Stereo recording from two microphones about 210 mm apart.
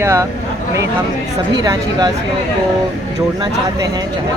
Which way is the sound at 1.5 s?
20° right (ahead or behind).